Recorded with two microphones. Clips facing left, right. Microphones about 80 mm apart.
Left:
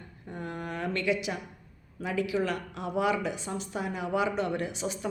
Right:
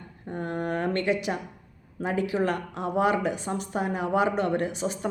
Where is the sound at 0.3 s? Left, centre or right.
Right.